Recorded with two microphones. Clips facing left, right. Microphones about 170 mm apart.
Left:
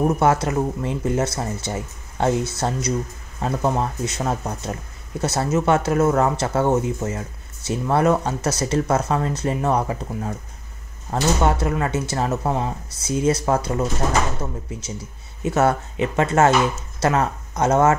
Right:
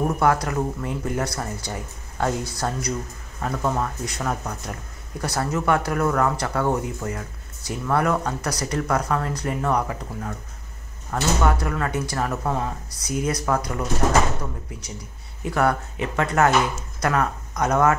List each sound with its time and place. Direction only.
0.0 s speech: 25° left (ahead or behind)